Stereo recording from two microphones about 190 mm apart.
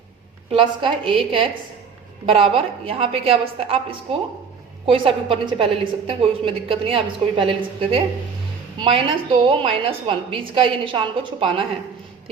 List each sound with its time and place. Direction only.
0.5 s a woman's voice: 25° right (ahead or behind)
2.3 s a woman's voice: 30° right (ahead or behind)